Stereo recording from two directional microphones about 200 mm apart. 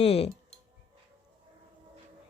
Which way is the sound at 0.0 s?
30° left (ahead or behind).